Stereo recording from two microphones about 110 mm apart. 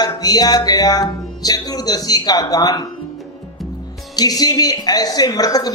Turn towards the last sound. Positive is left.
turn(degrees=35)  # may be behind; listen again after turning